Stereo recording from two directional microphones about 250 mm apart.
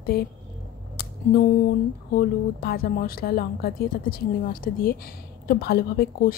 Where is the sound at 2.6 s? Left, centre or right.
Left.